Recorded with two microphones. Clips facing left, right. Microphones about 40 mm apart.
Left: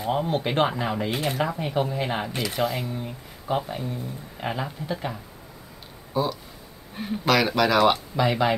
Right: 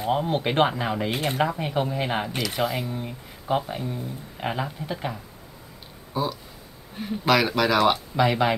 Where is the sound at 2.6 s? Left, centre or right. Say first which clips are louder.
Even; centre.